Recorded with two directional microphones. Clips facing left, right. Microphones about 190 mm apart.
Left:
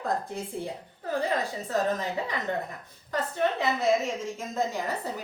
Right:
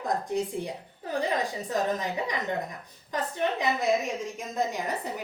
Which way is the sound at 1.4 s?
15° right (ahead or behind).